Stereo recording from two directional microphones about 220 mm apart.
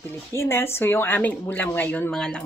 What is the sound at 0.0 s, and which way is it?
Speech, 10° left (ahead or behind).